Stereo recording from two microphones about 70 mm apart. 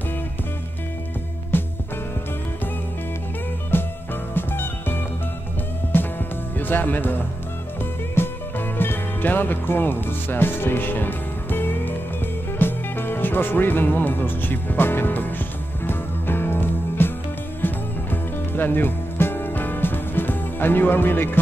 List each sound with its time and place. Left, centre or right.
1.5 s music: left
3.7 s music: left
6.5 s speech: left
7.8 s music: left
12.5 s speech: left
15.8 s music: left